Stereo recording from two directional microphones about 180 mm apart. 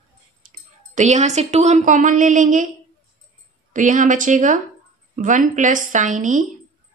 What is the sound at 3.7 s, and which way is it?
A woman's voice, 45° right (ahead or behind).